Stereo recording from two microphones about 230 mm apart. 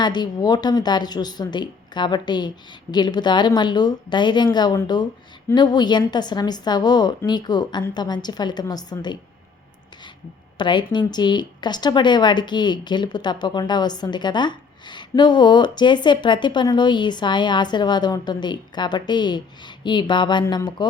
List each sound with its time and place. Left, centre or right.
0.0 s a woman's voice: centre
10.6 s a woman's voice: centre